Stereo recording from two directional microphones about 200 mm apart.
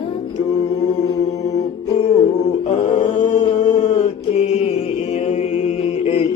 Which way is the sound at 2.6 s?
35° left (ahead or behind).